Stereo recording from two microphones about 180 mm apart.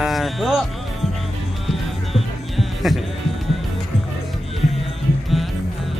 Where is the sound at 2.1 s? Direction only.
Centre (ahead or behind).